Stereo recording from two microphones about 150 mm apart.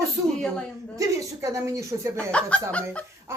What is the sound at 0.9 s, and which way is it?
Speech, 20° right (ahead or behind).